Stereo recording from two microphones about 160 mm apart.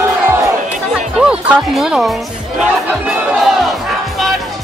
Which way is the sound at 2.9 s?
Centre (ahead or behind).